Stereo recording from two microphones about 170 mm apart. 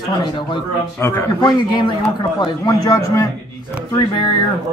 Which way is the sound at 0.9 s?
15° left (ahead or behind).